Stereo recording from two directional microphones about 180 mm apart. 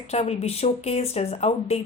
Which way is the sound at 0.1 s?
35° left (ahead or behind).